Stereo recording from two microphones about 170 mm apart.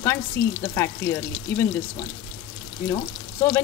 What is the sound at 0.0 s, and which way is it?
Speech, 15° left (ahead or behind).